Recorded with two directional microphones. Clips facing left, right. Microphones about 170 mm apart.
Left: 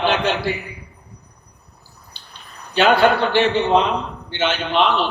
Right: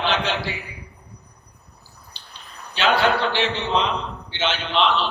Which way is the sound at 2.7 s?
50° left (ahead or behind).